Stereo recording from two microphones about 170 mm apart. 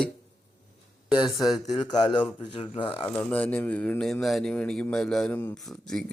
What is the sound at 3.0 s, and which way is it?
Speech, 10° left (ahead or behind).